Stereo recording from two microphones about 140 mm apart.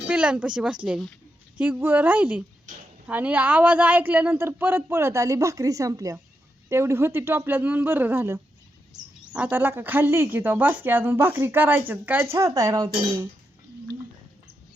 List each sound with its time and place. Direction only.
0.1 s a woman's voice: 10° right (ahead or behind); by 13.2 s 25° right (ahead or behind)